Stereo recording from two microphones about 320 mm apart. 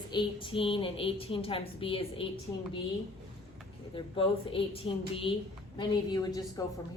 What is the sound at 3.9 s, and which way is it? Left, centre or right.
A woman's voice, centre.